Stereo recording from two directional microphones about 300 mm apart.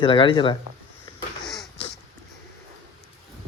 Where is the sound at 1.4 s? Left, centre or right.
Centre.